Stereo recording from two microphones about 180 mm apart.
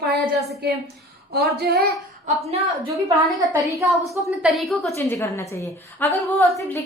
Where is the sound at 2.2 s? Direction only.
35° right (ahead or behind).